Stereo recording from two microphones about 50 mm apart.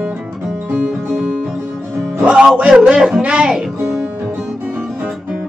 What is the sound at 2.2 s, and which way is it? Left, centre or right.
Music, right.